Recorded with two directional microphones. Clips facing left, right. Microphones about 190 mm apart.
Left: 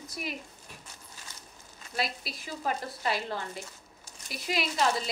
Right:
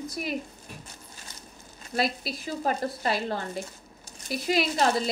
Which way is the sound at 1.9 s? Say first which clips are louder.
Right 6 dB; 35° right (ahead or behind).